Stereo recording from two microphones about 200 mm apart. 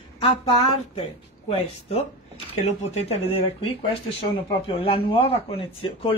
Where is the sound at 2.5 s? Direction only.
30° left (ahead or behind).